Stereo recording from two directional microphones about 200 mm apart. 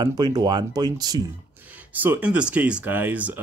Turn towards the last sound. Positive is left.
turn(degrees=-5)  # may be behind; listen again after turning